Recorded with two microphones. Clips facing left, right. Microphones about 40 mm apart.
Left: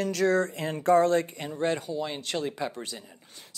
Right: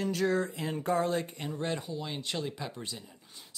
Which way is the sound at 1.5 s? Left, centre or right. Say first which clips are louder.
Left 6 dB; centre.